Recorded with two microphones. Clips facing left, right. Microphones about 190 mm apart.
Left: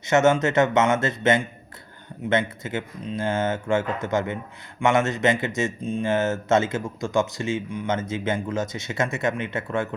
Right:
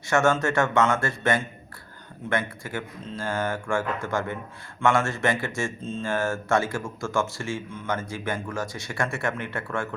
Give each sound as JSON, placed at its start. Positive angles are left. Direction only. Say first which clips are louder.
{"t": 0.0, "sound": "speech", "louder": "left 3 dB", "side_deg": 20}